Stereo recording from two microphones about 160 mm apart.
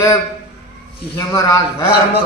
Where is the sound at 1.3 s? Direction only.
20° left (ahead or behind).